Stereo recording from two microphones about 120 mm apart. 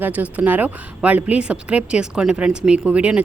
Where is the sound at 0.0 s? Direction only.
10° right (ahead or behind).